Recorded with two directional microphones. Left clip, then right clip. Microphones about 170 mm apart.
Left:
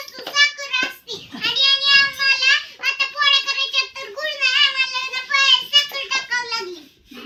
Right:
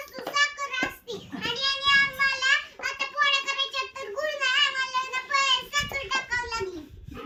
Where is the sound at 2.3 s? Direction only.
30° right (ahead or behind).